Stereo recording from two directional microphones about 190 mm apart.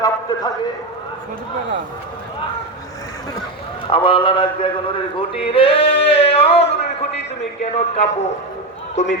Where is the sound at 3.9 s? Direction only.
25° left (ahead or behind).